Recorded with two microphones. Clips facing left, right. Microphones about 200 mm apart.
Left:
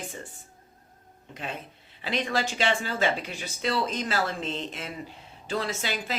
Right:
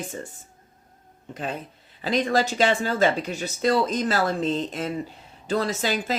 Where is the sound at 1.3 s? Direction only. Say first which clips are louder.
Right 5 dB; 40° right (ahead or behind).